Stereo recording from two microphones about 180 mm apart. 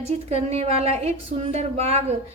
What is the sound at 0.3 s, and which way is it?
A woman's voice, 35° right (ahead or behind).